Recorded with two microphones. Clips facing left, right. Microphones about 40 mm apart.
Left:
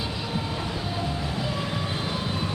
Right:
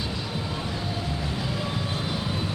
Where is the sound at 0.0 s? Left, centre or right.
Centre.